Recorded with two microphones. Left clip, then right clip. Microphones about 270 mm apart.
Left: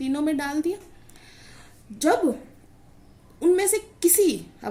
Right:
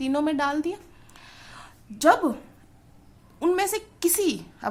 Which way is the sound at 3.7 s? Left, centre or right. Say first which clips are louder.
Left 4 dB; right.